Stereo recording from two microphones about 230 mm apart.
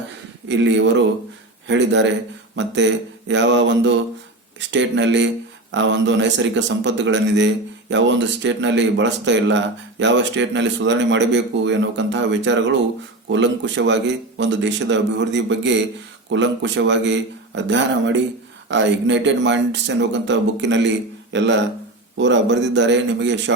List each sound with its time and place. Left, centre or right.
0.4 s a man's voice: right